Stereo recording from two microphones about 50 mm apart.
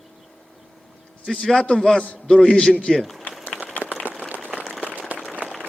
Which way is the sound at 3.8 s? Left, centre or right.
Left.